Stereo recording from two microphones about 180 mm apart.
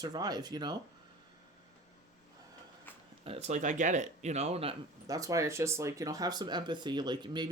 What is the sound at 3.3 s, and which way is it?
Speech, 40° right (ahead or behind).